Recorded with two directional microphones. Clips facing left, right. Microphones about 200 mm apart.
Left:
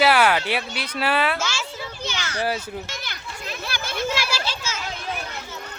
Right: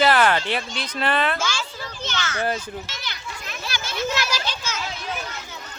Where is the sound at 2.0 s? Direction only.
10° left (ahead or behind).